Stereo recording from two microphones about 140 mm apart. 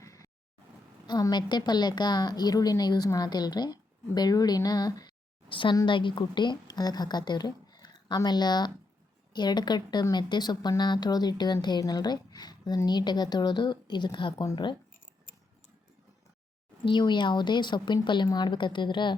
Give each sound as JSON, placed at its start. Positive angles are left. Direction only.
{"t": 0.0, "sound": "vehicle", "side_deg": 25}
{"t": 1.0, "sound": "a woman's voice", "side_deg": 30}
{"t": 16.8, "sound": "a woman's voice", "side_deg": 35}